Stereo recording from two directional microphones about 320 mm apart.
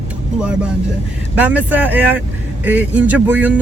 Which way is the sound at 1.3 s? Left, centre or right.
Centre.